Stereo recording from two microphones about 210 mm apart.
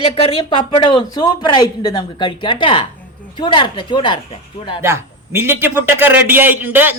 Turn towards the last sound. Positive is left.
turn(degrees=-10)  # may be behind; listen again after turning